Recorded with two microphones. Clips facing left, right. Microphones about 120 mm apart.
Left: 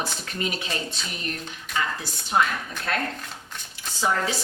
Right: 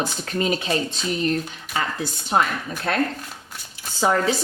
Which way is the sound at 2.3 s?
55° right (ahead or behind).